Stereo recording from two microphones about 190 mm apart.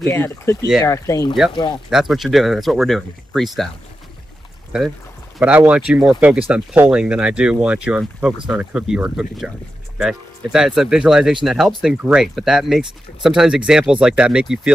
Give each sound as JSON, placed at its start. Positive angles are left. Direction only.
{"t": 0.1, "sound": "speech", "side_deg": 15}
{"t": 1.9, "sound": "speech", "side_deg": 0}
{"t": 4.7, "sound": "speech", "side_deg": -5}